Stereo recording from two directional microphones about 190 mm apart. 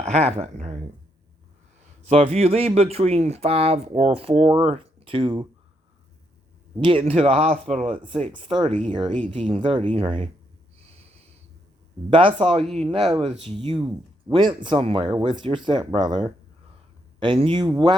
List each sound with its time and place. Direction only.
0.0 s speech: 35° right (ahead or behind)
2.0 s speech: 30° right (ahead or behind)
6.8 s speech: 30° right (ahead or behind)
12.1 s speech: 30° right (ahead or behind)